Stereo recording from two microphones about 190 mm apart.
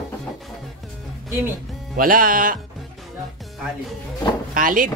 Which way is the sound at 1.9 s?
50° right (ahead or behind).